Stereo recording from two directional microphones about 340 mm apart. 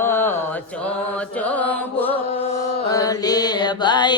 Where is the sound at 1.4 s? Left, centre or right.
Centre.